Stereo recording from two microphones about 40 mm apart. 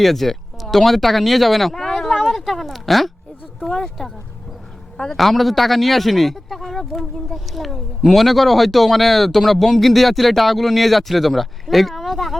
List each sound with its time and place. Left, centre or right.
0.0 s speech: centre
5.1 s speech: centre